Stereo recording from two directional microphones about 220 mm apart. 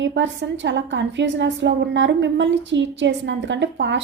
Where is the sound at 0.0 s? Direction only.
55° right (ahead or behind).